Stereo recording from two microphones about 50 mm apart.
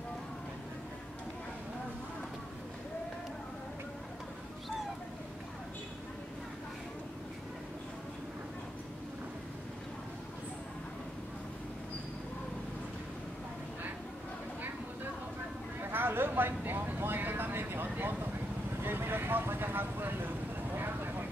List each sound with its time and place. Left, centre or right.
15.8 s vehicle: right